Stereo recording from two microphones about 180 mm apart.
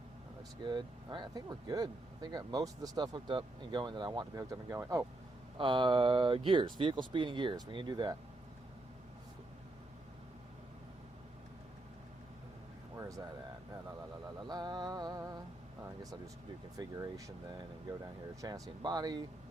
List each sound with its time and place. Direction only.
0.6 s speech: 25° right (ahead or behind)
5.5 s speech: 25° right (ahead or behind)
13.0 s a sound: 20° right (ahead or behind)
14.4 s music: 25° right (ahead or behind)
16.7 s speech: 20° right (ahead or behind)